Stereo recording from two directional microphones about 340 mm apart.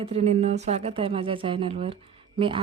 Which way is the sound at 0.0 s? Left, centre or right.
Centre.